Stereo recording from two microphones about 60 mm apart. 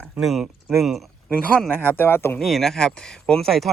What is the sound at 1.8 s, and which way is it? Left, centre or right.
Speech, left.